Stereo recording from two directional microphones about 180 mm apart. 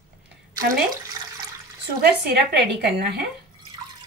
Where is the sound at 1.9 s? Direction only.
65° right (ahead or behind).